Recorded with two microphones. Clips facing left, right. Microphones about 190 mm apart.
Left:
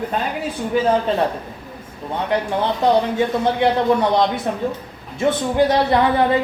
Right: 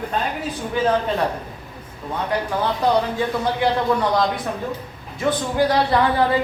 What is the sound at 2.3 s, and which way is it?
Speech, 25° left (ahead or behind).